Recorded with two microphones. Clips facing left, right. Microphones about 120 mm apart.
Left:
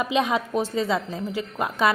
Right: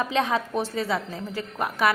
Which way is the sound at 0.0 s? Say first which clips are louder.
Left 1 dB; 15° left (ahead or behind).